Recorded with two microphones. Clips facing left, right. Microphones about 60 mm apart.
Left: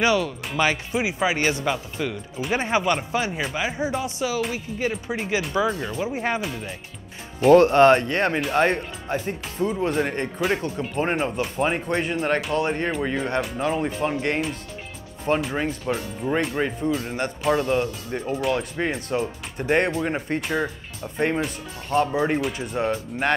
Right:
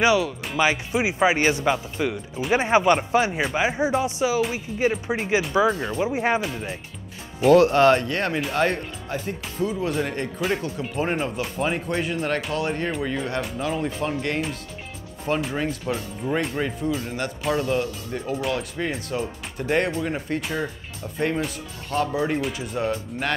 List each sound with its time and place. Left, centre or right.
0.0 s speech: centre
7.3 s speech: centre
9.9 s speech: centre
11.3 s speech: centre
11.7 s speech: centre
12.4 s speech: centre; by 15.4 s left
15.9 s speech: centre
16.5 s speech: centre